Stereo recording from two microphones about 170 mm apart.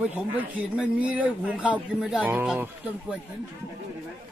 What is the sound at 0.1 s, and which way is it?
A man's voice, 10° right (ahead or behind).